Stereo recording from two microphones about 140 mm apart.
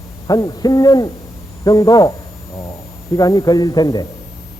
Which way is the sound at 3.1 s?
25° left (ahead or behind).